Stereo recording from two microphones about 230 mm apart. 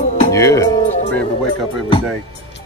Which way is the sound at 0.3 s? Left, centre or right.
Centre.